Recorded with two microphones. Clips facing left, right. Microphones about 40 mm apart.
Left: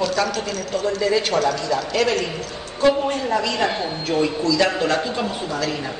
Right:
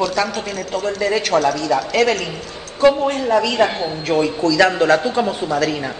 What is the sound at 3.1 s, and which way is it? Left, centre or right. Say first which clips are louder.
Speech: right 4 dB; right.